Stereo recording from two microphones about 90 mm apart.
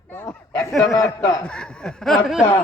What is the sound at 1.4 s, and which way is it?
Snicker, 10° left (ahead or behind).